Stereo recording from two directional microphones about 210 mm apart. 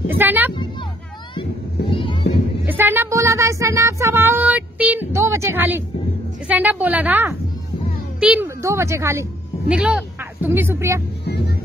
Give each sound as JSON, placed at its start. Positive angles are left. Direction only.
{"t": 0.1, "sound": "speech", "side_deg": -10}
{"t": 1.3, "sound": "vehicle", "side_deg": 25}
{"t": 2.6, "sound": "a woman's voice", "side_deg": -10}